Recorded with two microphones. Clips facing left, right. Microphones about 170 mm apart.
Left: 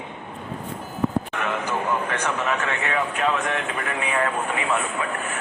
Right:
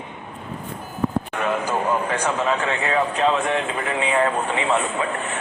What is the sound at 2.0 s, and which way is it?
Speech, 20° right (ahead or behind).